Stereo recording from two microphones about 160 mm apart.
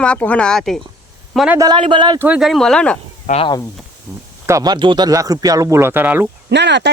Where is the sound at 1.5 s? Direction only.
25° right (ahead or behind).